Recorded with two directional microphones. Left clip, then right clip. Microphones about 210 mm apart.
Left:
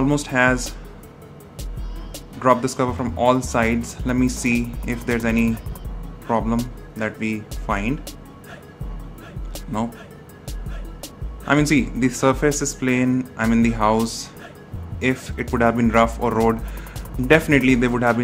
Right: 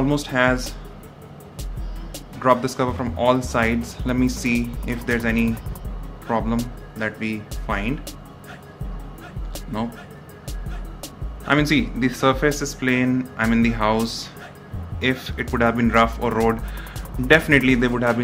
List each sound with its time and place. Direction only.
0.0 s speech: 15° left (ahead or behind)
2.4 s speech: 15° left (ahead or behind)
11.4 s speech: 15° left (ahead or behind)